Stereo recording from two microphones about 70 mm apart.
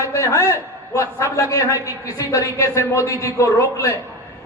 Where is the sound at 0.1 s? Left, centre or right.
Left.